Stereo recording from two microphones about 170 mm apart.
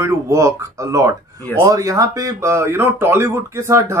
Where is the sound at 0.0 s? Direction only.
15° right (ahead or behind).